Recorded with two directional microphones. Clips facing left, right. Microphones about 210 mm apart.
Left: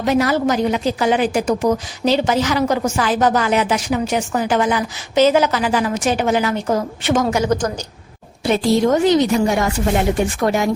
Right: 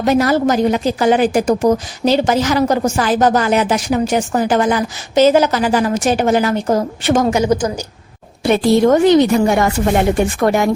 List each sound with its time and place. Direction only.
0.0 s a woman's voice: 45° right (ahead or behind)
7.3 s a woman's voice: 15° right (ahead or behind)
8.4 s speech: 60° right (ahead or behind)